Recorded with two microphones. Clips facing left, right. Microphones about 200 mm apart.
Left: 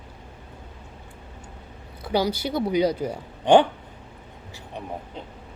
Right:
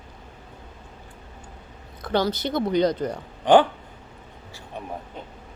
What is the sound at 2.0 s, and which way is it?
Speech, 10° left (ahead or behind).